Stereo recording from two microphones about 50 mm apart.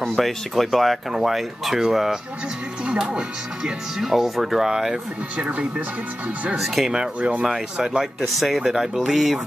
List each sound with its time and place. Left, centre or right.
0.1 s speech: centre
2.8 s speech: centre
4.0 s speech: centre
5.4 s speech: right
6.6 s speech: centre
7.2 s speech: right
8.4 s speech: centre